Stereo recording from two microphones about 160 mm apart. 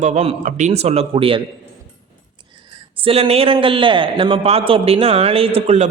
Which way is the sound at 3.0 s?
35° right (ahead or behind).